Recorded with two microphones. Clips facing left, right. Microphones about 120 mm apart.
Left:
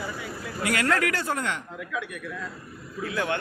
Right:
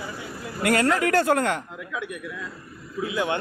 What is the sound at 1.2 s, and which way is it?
Speech, 60° right (ahead or behind).